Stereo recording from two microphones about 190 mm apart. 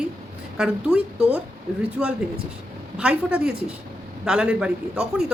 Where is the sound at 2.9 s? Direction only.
5° right (ahead or behind).